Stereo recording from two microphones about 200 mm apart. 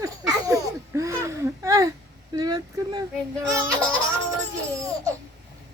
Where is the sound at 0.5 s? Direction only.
15° right (ahead or behind).